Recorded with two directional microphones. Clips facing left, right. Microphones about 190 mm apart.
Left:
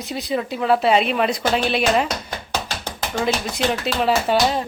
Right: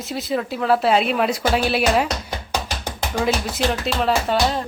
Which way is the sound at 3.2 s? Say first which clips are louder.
Even; centre (ahead or behind).